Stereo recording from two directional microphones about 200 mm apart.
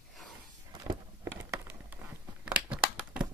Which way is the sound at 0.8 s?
15° right (ahead or behind).